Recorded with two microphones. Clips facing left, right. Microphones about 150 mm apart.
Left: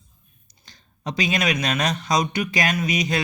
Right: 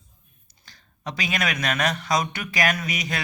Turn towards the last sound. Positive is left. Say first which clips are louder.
# left 6 dB
turn(degrees=20)  # may be behind; listen again after turning